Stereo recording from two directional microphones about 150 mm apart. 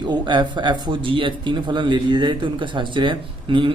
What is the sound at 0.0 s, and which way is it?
A man's voice, 30° right (ahead or behind).